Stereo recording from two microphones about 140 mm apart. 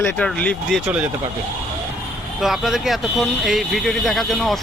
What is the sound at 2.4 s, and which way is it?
Speech, centre (ahead or behind).